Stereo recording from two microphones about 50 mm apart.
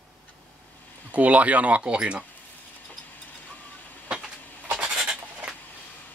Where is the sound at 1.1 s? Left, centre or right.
Right.